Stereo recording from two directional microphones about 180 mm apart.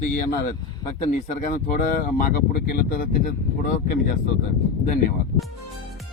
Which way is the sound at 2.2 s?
55° left (ahead or behind).